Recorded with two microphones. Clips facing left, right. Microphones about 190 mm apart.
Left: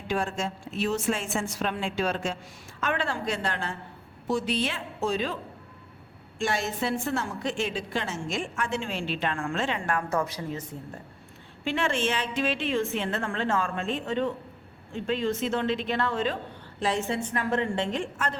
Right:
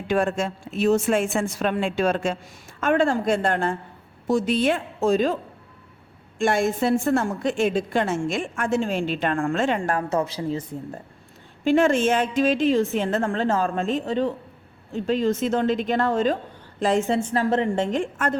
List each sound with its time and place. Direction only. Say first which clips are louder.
0.1 s a woman's voice: right 6 dB; 55° right (ahead or behind)
6.4 s a woman's voice: right 7 dB; 50° right (ahead or behind)
10.1 s a woman's voice: right 5 dB; 25° right (ahead or behind)
11.6 s a woman's voice: right 9 dB; 45° right (ahead or behind)
17.3 s a woman's voice: right 5 dB; 30° right (ahead or behind)
17.9 s a woman's voice: right 6 dB; 50° right (ahead or behind)